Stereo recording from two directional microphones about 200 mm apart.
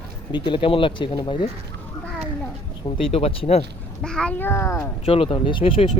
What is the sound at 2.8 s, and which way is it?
Speech, 25° left (ahead or behind).